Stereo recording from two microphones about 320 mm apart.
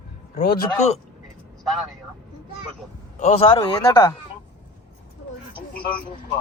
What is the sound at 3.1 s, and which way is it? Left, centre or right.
Speech, centre.